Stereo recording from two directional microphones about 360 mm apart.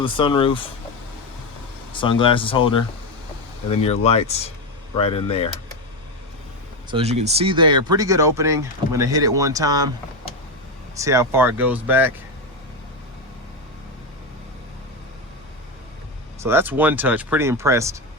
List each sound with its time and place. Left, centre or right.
0.0 s speech: centre
2.0 s speech: centre
6.9 s speech: centre
10.9 s speech: centre
16.4 s speech: centre